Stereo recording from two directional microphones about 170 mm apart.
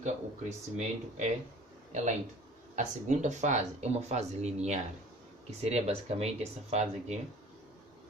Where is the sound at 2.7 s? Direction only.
45° right (ahead or behind).